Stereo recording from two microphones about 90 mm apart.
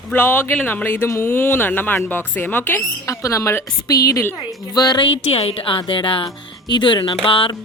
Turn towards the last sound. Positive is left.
turn(degrees=75)  # may be behind; listen again after turning